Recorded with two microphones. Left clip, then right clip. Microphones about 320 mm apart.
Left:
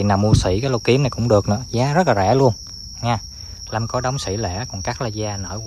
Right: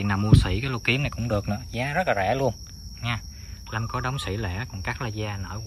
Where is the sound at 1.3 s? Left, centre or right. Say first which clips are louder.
Left 13 dB; right.